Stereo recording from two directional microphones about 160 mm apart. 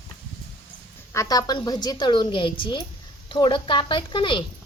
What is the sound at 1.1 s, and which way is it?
A woman's voice, 20° left (ahead or behind).